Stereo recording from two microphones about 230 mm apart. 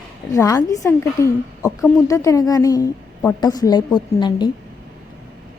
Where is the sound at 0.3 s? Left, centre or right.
Centre.